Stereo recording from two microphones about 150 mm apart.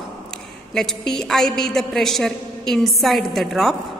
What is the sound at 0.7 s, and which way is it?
A man's voice, 5° left (ahead or behind).